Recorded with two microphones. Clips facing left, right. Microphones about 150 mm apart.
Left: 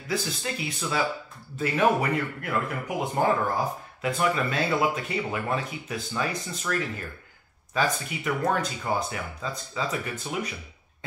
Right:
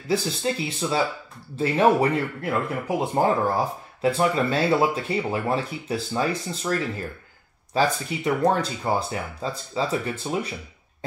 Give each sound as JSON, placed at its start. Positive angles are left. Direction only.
{"t": 0.1, "sound": "speech", "side_deg": -30}